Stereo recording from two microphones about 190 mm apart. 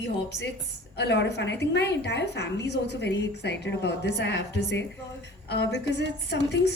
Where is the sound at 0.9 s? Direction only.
65° left (ahead or behind).